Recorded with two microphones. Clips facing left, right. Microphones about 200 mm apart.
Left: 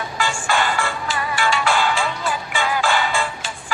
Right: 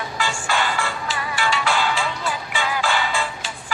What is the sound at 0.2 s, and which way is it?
Music, 50° left (ahead or behind).